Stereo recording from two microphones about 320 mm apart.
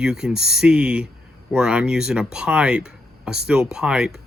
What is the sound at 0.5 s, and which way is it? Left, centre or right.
Cutlery, centre.